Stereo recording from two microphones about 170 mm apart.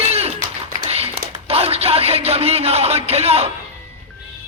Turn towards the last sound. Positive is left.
turn(degrees=-35)  # may be behind; listen again after turning